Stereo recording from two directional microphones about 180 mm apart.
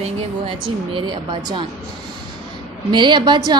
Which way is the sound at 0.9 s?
25° right (ahead or behind).